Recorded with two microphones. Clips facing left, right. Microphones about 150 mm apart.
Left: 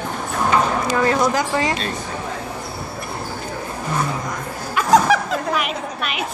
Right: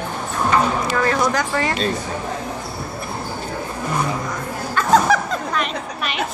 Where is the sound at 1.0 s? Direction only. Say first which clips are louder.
Left 2 dB; 20° left (ahead or behind).